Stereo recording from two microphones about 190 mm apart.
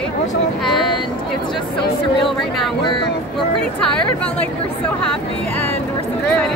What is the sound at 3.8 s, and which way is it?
Speech, 5° left (ahead or behind).